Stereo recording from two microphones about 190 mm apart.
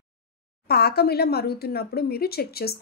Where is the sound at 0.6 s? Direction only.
55° left (ahead or behind).